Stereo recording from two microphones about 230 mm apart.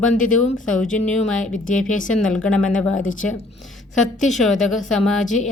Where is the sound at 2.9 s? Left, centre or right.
Left.